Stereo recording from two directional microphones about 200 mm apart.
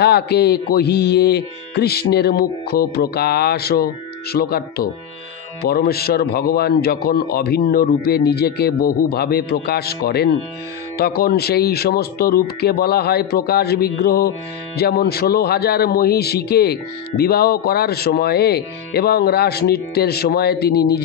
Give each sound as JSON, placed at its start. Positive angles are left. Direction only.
{"t": 0.0, "sound": "music", "side_deg": 55}